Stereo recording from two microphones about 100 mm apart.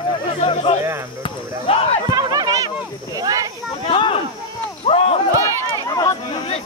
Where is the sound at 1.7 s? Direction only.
75° left (ahead or behind).